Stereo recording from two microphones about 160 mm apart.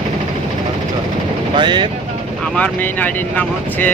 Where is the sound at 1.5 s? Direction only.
30° right (ahead or behind).